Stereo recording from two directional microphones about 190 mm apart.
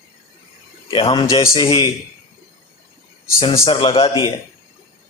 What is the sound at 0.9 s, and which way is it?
A man's voice, 30° left (ahead or behind).